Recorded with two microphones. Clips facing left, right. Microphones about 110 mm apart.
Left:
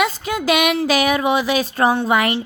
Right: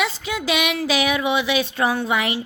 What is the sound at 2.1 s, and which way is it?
Speech, 50° left (ahead or behind).